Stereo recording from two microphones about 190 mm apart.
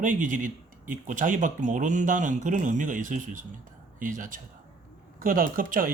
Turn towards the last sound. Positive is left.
turn(degrees=-45)  # may be behind; listen again after turning